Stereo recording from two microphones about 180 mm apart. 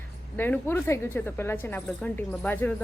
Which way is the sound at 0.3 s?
10° left (ahead or behind).